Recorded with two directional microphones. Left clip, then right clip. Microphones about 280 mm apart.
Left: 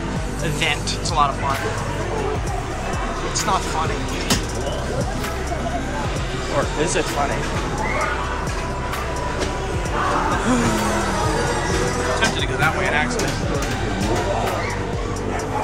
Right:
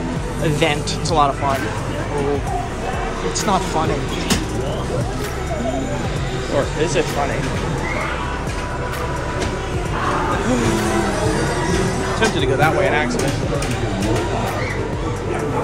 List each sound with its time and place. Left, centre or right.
0.6 s speech: centre
12.2 s speech: centre